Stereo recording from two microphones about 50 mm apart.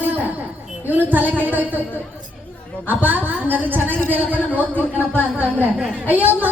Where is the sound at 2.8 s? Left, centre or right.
Right.